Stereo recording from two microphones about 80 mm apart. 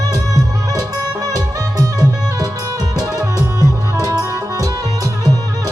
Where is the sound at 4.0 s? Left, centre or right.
Right.